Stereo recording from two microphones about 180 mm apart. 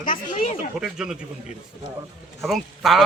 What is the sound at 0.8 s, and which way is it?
Speech, 5° right (ahead or behind).